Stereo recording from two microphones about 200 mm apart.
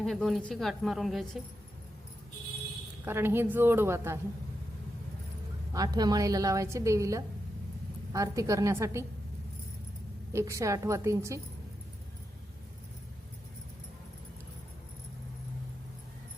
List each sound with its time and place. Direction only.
0.0 s a woman's voice: centre (ahead or behind)
3.0 s a woman's voice: 10° right (ahead or behind)
5.7 s a woman's voice: 20° right (ahead or behind)
10.3 s a woman's voice: 15° right (ahead or behind)